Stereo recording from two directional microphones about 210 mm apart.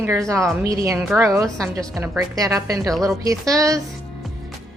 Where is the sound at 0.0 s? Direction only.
15° right (ahead or behind).